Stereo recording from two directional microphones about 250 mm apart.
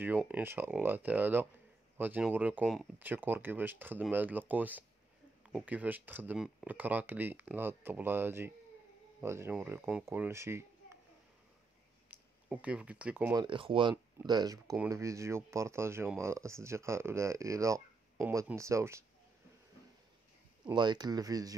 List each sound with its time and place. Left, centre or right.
0.0 s speech: centre
12.1 s speech: centre
20.6 s speech: centre